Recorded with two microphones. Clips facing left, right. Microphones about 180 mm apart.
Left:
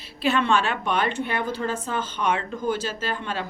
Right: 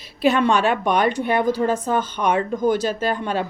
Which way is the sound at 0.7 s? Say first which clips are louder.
Right 6 dB; 45° right (ahead or behind).